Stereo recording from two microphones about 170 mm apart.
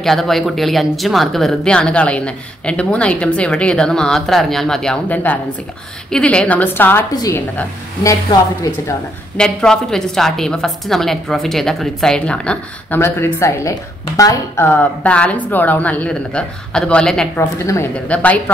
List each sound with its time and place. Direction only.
0.0 s a woman's voice: centre (ahead or behind); by 8.4 s 20° left (ahead or behind)
9.4 s a woman's voice: 5° left (ahead or behind)
17.6 s a woman's voice: 15° left (ahead or behind)